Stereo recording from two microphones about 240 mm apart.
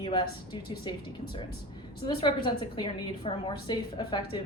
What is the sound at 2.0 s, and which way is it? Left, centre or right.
A woman's voice, left.